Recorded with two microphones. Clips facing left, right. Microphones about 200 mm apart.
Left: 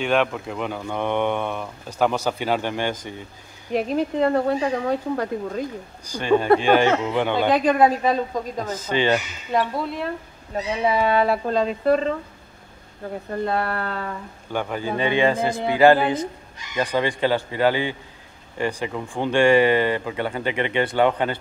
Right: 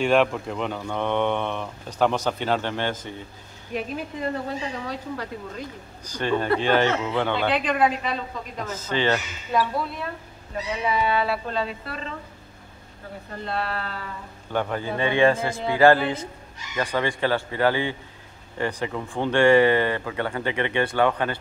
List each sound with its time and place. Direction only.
0.0 s speech: centre (ahead or behind)
3.7 s speech: 65° left (ahead or behind); by 5.7 s 50° left (ahead or behind)
6.0 s speech: 10° left (ahead or behind)
7.5 s a woman's voice: 40° left (ahead or behind)
8.6 s speech: 15° left (ahead or behind)
10.5 s speech: 40° left (ahead or behind)
13.3 s speech: 50° left (ahead or behind)
14.5 s a man's voice: centre (ahead or behind)
15.0 s speech: 20° left (ahead or behind)